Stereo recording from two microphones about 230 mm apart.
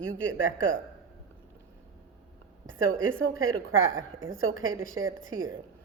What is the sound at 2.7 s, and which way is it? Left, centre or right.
A woman's voice, right.